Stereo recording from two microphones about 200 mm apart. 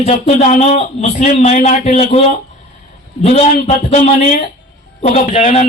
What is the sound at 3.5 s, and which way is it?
Speech, 30° left (ahead or behind).